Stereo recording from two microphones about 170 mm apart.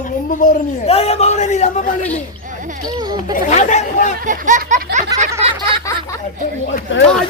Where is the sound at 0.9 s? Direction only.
35° left (ahead or behind).